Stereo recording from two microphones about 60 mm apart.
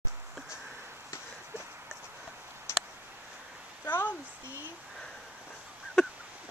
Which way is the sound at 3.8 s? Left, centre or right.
Left.